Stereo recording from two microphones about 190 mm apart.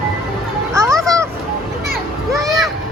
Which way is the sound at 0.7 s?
15° right (ahead or behind).